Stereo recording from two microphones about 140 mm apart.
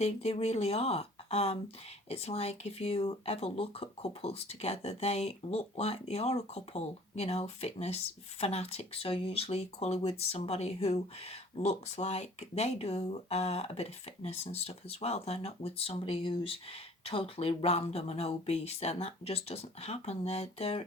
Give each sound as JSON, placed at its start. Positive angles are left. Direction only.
{"t": 0.0, "sound": "speech", "side_deg": 45}